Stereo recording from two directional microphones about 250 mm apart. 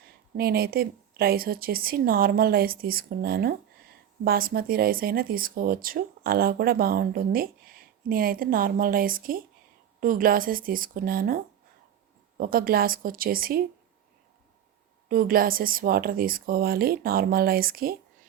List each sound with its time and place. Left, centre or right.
0.3 s speech: right
15.1 s speech: right